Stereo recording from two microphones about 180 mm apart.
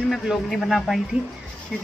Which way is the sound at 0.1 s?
Centre (ahead or behind).